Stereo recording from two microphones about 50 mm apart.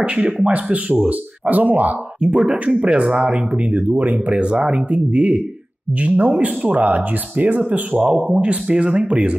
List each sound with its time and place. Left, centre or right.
0.0 s speech: right
0.9 s speech: right
2.2 s speech: centre
2.5 s speech: right
8.1 s speech: right